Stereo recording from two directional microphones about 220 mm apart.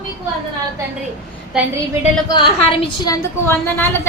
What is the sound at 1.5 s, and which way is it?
Speech, 5° right (ahead or behind).